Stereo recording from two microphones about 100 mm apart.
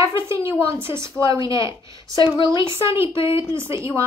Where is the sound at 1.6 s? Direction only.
50° left (ahead or behind).